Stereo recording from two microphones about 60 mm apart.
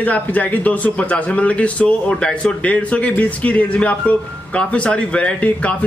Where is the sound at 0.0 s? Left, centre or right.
Left.